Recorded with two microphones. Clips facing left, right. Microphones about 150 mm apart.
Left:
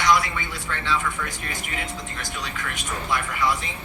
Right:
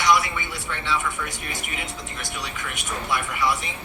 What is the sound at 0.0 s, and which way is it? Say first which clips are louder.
Speech: even; 15° right (ahead or behind).